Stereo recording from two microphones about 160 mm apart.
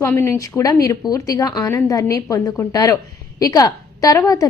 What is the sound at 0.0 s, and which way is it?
A woman's voice, 15° left (ahead or behind).